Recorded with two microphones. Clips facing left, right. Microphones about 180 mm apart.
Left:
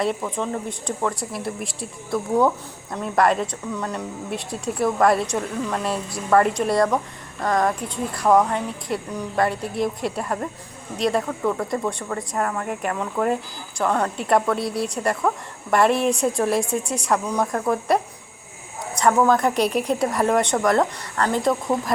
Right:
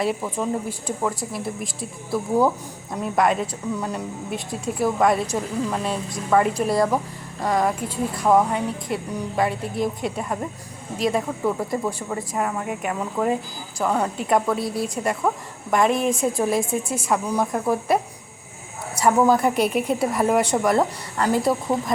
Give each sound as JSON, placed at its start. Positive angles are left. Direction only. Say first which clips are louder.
{"t": 0.0, "sound": "speech", "louder": "even", "side_deg": -5}